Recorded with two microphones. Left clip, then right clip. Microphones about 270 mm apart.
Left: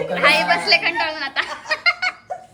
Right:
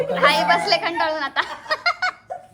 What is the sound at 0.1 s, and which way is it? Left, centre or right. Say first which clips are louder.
Chuckle: left 1 dB; centre.